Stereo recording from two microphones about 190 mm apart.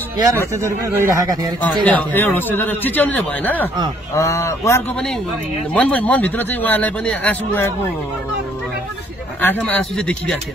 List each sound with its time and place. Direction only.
0.2 s speech: 15° right (ahead or behind)
1.6 s a man's voice: 10° left (ahead or behind)
9.4 s speech: 10° left (ahead or behind)